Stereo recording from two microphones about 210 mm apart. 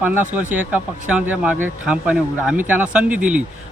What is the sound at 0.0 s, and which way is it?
Speech, 10° right (ahead or behind).